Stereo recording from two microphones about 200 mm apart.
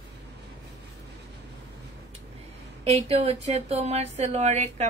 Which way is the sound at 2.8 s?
30° right (ahead or behind).